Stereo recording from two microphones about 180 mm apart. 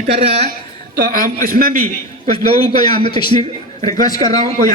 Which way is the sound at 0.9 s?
50° right (ahead or behind).